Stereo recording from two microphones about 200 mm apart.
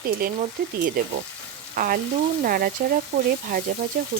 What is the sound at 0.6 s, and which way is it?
Frying, 45° right (ahead or behind).